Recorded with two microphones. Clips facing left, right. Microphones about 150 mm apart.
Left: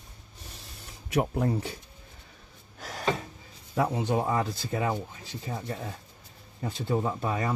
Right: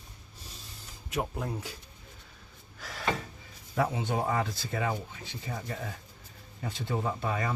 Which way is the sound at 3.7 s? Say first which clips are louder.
Left 3 dB; 40° left (ahead or behind).